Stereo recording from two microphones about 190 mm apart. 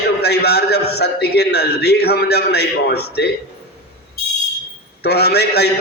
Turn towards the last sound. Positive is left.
turn(degrees=60)  # may be behind; listen again after turning